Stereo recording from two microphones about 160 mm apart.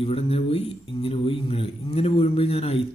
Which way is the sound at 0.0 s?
35° left (ahead or behind).